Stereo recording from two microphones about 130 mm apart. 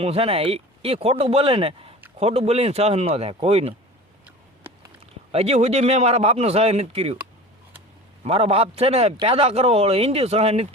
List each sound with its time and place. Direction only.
0.0 s a man's voice: 50° right (ahead or behind)
5.3 s a man's voice: 50° right (ahead or behind)
8.2 s a man's voice: 50° right (ahead or behind)